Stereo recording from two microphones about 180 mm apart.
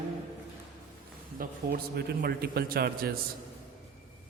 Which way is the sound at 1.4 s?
60° right (ahead or behind).